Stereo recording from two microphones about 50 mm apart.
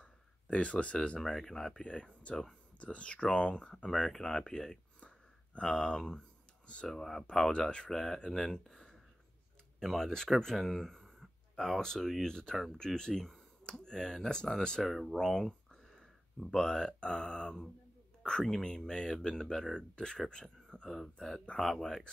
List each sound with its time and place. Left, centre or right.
0.0 s a sound: left
1.2 s speech: centre
1.8 s speech: left
5.0 s a sound: left
6.9 s speech: centre
7.5 s speech: centre
7.9 s speech: centre
14.8 s speech: centre
20.9 s speech: centre